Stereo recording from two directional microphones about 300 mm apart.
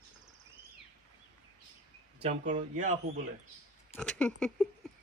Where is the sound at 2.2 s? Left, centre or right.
Right.